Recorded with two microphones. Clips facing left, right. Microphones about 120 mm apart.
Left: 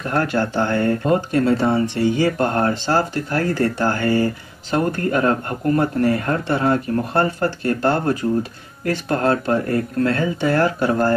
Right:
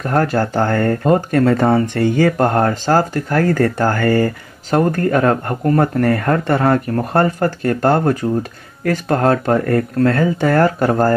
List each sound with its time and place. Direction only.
0.0 s speech: 40° right (ahead or behind)